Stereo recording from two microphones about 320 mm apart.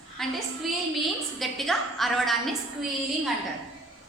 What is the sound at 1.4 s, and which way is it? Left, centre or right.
A woman's voice, centre.